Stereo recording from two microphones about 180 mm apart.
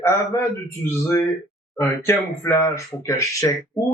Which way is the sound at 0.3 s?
15° left (ahead or behind).